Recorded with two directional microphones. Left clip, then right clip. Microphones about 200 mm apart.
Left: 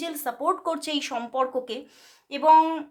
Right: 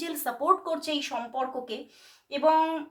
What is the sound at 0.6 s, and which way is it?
A woman's voice, 40° left (ahead or behind).